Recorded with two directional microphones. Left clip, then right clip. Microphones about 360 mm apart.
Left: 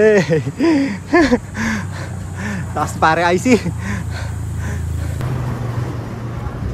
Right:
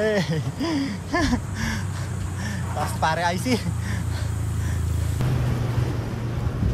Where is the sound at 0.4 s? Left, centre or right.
Right.